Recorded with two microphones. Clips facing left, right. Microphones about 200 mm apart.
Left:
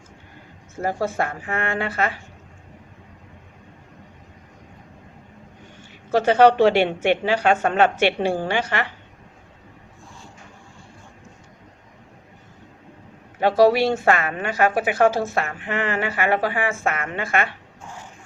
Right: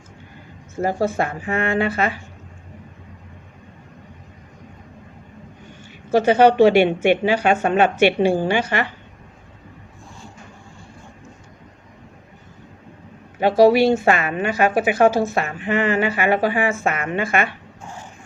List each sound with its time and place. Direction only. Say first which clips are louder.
1.0 s a woman's voice: right 3 dB; 20° right (ahead or behind)
6.1 s a woman's voice: right 1 dB; 15° right (ahead or behind)
13.4 s a woman's voice: right 3 dB; 15° right (ahead or behind)